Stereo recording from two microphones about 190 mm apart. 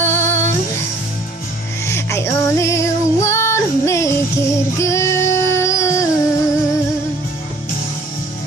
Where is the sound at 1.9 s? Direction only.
15° left (ahead or behind).